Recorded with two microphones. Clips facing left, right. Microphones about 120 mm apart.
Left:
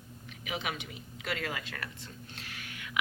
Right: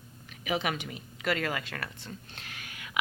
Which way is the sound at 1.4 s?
55° right (ahead or behind).